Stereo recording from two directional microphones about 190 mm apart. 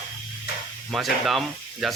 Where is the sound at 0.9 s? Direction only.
Centre (ahead or behind).